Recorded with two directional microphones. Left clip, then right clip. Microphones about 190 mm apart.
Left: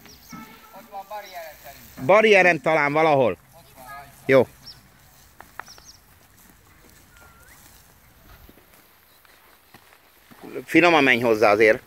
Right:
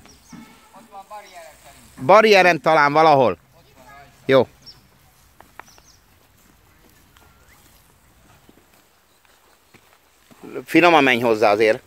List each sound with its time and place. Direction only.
0.9 s speech: 30° left (ahead or behind)
2.0 s speech: 20° right (ahead or behind)
3.8 s a sound: 50° left (ahead or behind)
4.3 s speech: 15° right (ahead or behind)
10.4 s speech: 20° right (ahead or behind); by 11.8 s 5° right (ahead or behind)